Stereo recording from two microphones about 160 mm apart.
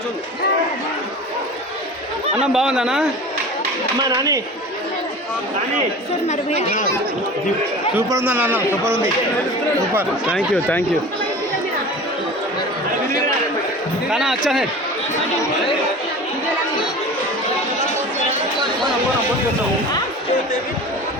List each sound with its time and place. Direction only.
2.5 s speech: 5° right (ahead or behind)
4.0 s speech: 25° right (ahead or behind)
6.2 s speech: 45° left (ahead or behind)
7.9 s a man's voice: 15° right (ahead or behind)
10.3 s speech: 10° left (ahead or behind)
14.1 s speech: centre (ahead or behind)